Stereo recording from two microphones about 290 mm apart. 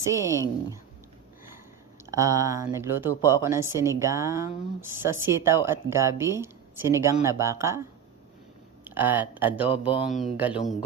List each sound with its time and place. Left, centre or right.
0.0 s a woman's voice: centre
2.0 s a woman's voice: centre
8.8 s speech: centre